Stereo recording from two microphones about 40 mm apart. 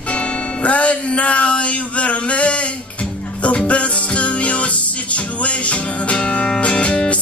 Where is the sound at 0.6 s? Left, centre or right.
Left.